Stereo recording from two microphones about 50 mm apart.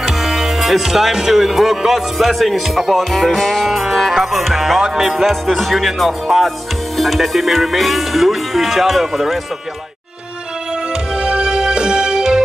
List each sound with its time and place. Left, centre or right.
0.0 s speech: centre
3.0 s music: centre
11.1 s music: centre